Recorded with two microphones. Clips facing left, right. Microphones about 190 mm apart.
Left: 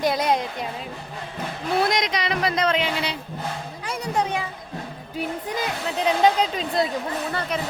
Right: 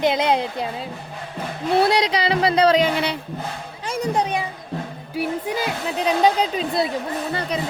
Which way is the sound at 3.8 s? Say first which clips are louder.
Right 3 dB; 15° right (ahead or behind).